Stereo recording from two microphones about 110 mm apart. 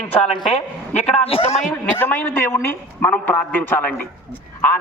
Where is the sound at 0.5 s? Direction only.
75° left (ahead or behind).